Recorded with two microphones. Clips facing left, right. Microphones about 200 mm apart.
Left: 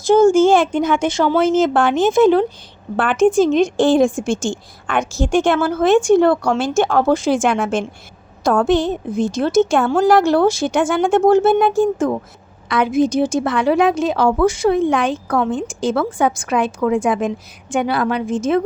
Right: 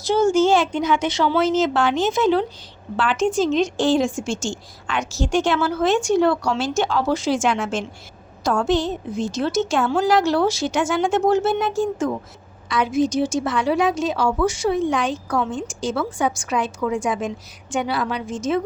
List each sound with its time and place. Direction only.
0.0 s a woman's voice: 50° left (ahead or behind)